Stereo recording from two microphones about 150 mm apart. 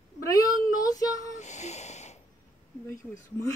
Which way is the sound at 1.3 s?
50° left (ahead or behind).